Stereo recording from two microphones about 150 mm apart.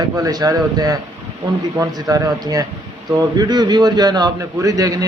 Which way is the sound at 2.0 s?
20° right (ahead or behind).